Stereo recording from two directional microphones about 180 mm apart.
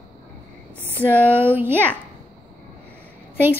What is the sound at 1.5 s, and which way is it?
Speech, 10° right (ahead or behind).